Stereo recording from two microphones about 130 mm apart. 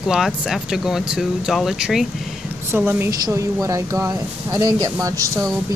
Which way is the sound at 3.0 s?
25° right (ahead or behind).